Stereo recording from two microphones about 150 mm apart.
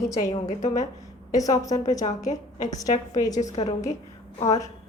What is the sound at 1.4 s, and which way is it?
Speech, 25° left (ahead or behind).